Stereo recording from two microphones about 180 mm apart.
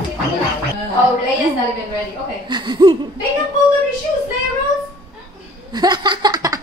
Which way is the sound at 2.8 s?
25° right (ahead or behind).